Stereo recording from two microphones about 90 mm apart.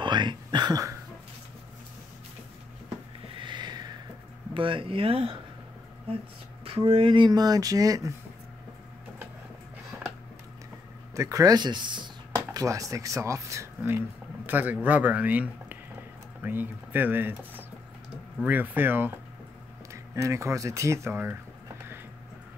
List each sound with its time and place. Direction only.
0.0 s speech: 60° right (ahead or behind)
3.3 s a sound: 60° right (ahead or behind)
4.6 s a sound: 75° right (ahead or behind); by 5.4 s 90° right
6.6 s speech: 90° right; by 8.1 s 40° right (ahead or behind)
11.1 s speech: 40° right (ahead or behind); by 12.1 s 60° right (ahead or behind)
12.4 s speech: 40° right (ahead or behind)
19.9 s speech: 35° right (ahead or behind)